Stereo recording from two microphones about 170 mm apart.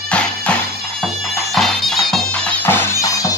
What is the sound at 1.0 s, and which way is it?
Bagpipes, centre (ahead or behind).